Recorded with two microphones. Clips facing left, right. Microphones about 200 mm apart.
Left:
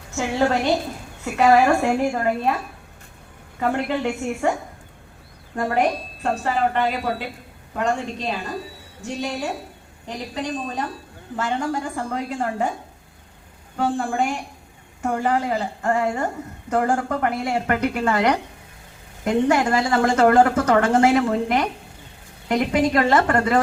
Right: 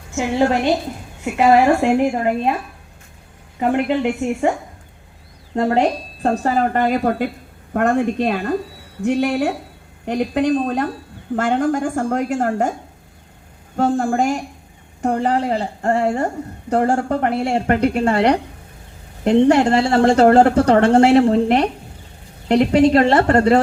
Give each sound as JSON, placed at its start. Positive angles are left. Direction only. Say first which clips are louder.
{"t": 0.2, "sound": "a woman's voice", "louder": "right 3 dB", "side_deg": -20}
{"t": 3.6, "sound": "a woman's voice", "louder": "right 5 dB", "side_deg": -20}
{"t": 5.5, "sound": "a woman's voice", "louder": "right 4 dB", "side_deg": -25}
{"t": 13.7, "sound": "a woman's voice", "louder": "right 5 dB", "side_deg": -45}